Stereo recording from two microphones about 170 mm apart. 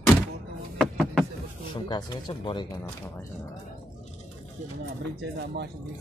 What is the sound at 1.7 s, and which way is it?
Speech, 25° left (ahead or behind).